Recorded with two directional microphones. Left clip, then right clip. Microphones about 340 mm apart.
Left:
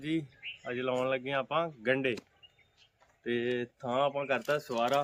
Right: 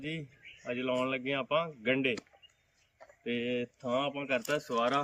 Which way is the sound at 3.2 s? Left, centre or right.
Centre.